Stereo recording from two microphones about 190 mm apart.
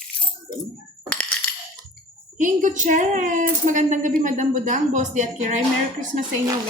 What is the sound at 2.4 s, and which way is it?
Speech, 40° right (ahead or behind).